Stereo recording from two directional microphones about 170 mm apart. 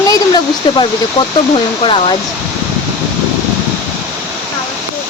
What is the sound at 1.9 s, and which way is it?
Speech, 35° left (ahead or behind).